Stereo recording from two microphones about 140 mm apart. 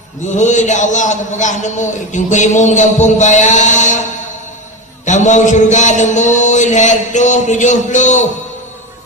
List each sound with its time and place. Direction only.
0.3 s a man's voice: 60° left (ahead or behind)
5.0 s a man's voice: 60° left (ahead or behind)